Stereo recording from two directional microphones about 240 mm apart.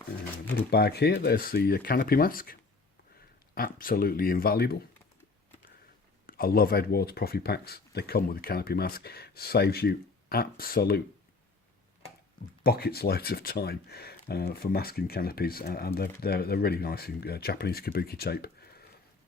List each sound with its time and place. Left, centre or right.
0.5 s speech: left
3.8 s speech: left
6.2 s speech: left
12.6 s speech: left